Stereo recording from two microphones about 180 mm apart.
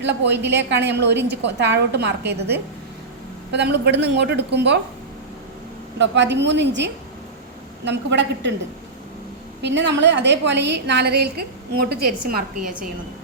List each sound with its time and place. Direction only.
0.0 s a woman's voice: 70° right (ahead or behind)
6.0 s a woman's voice: 80° right
9.6 s a woman's voice: 80° right; by 12.4 s 60° right (ahead or behind)